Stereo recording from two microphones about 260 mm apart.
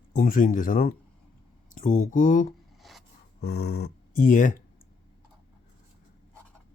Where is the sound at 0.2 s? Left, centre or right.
Left.